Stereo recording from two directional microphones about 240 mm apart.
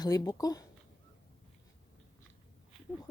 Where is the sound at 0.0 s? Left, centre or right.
Centre.